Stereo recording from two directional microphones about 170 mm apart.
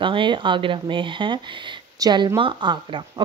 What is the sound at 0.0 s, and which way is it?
Speech, 30° right (ahead or behind).